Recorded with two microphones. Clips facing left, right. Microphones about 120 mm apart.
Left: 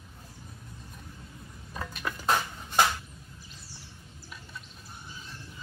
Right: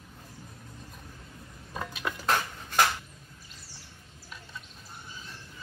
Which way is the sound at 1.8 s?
10° right (ahead or behind).